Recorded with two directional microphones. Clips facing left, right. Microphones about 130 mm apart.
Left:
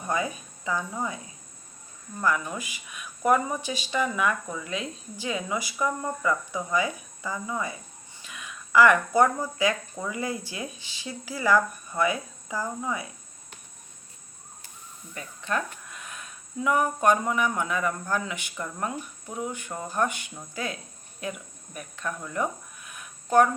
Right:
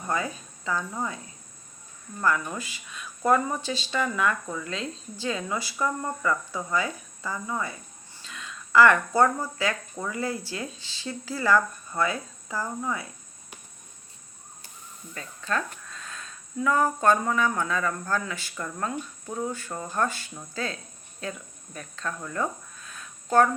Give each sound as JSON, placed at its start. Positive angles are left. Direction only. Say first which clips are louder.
{"t": 0.1, "sound": "speech", "louder": "left 1 dB", "side_deg": 15}
{"t": 2.5, "sound": "speech", "louder": "even", "side_deg": 15}
{"t": 15.1, "sound": "speech", "louder": "even", "side_deg": 20}